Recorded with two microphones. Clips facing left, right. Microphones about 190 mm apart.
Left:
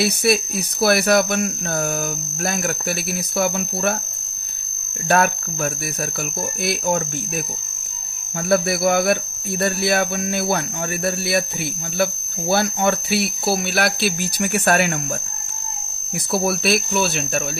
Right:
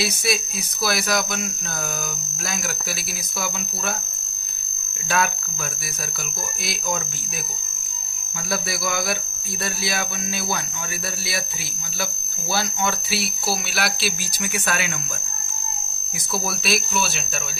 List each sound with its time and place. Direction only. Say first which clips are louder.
0.0 s speech: left 6 dB; 60° left (ahead or behind)
5.0 s speech: left 6 dB; 55° left (ahead or behind)
8.5 s speech: left 10 dB; 60° left (ahead or behind)
16.3 s speech: left 6 dB; 60° left (ahead or behind)